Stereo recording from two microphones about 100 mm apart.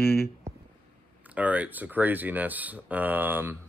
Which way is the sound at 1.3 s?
15° right (ahead or behind).